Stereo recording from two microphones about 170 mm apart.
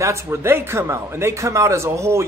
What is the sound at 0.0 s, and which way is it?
A man's voice, 15° right (ahead or behind).